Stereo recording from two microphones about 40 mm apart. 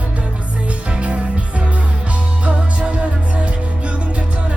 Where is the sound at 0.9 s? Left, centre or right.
Right.